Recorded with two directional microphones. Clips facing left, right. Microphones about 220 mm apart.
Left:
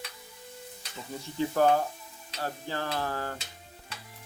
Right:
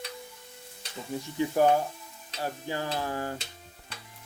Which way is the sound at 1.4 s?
15° right (ahead or behind).